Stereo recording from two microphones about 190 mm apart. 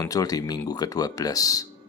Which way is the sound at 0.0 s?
20° left (ahead or behind).